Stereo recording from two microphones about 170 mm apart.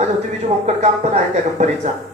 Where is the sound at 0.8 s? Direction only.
40° right (ahead or behind).